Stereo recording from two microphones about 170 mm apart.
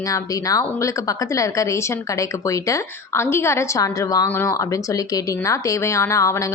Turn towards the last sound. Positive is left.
turn(degrees=15)  # may be behind; listen again after turning